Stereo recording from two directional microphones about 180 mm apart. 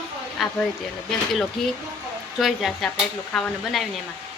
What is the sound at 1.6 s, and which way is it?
Speech, centre (ahead or behind).